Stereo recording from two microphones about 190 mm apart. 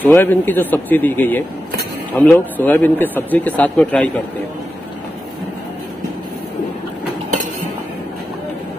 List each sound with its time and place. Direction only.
0.0 s a man's voice: 10° left (ahead or behind)